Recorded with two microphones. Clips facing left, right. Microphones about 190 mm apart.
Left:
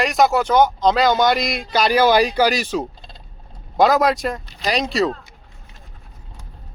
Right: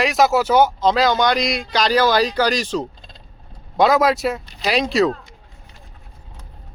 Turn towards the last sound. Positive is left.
turn(degrees=0)  # may be behind; listen again after turning